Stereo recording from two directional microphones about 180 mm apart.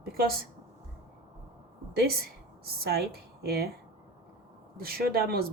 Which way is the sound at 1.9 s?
60° right (ahead or behind).